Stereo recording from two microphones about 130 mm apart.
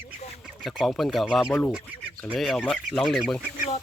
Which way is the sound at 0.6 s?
Centre (ahead or behind).